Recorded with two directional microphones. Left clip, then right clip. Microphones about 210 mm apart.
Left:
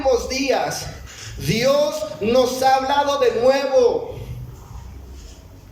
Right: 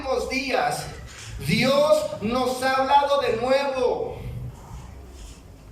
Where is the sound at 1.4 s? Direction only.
35° left (ahead or behind).